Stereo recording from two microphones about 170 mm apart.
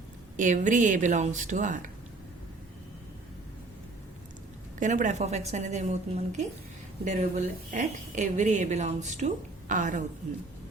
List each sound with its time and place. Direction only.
0.3 s a woman's voice: 45° right (ahead or behind)
4.8 s a woman's voice: 45° right (ahead or behind)